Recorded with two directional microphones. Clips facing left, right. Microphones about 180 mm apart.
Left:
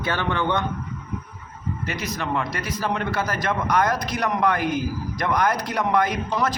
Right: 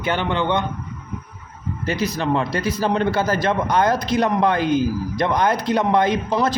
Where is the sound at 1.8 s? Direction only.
30° right (ahead or behind).